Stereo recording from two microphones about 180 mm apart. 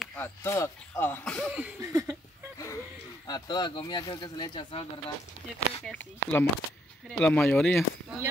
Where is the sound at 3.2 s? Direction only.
20° left (ahead or behind).